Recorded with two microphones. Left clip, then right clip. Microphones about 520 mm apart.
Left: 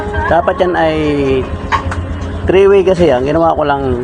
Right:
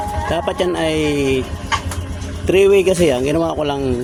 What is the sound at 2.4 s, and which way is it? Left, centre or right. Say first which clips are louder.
Speech: left 4 dB; right.